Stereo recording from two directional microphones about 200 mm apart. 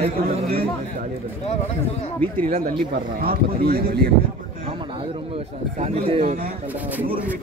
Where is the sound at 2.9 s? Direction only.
50° right (ahead or behind).